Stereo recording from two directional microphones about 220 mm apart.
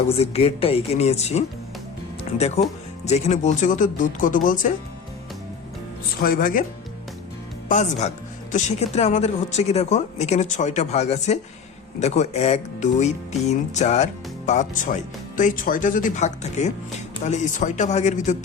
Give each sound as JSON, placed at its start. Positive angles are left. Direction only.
{"t": 0.1, "sound": "speech", "side_deg": 25}
{"t": 6.2, "sound": "speech", "side_deg": 40}
{"t": 7.7, "sound": "speech", "side_deg": 30}